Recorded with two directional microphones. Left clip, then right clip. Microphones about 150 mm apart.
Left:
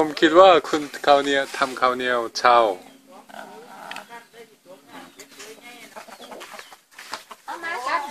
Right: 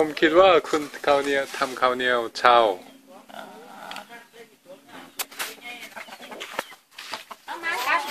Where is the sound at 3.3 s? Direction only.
15° right (ahead or behind).